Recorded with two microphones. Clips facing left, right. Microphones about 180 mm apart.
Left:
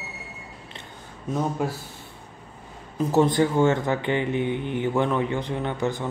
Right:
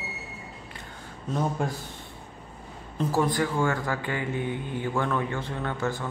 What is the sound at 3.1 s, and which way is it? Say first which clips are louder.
Speech: left 6 dB; 25° left (ahead or behind).